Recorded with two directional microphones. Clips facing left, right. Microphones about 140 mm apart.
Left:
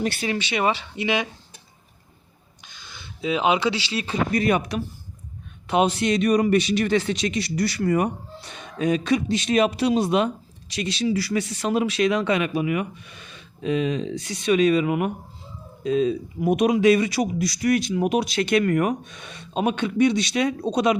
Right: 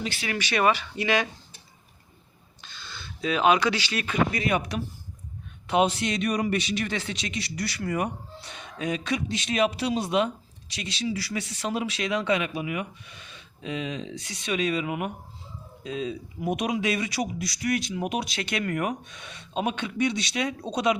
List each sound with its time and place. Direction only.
0.0 s a man's voice: 50° left (ahead or behind)
0.3 s speech: 25° left (ahead or behind)
2.6 s a man's voice: 15° left (ahead or behind); by 21.0 s 45° left (ahead or behind)